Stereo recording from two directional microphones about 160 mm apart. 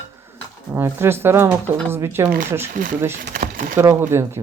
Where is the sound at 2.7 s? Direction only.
55° right (ahead or behind).